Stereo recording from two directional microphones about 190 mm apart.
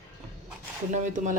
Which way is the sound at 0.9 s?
40° right (ahead or behind).